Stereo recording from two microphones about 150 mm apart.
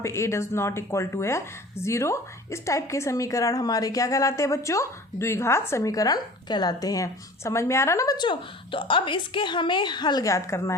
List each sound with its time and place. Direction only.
0.0 s a woman's voice: 20° left (ahead or behind)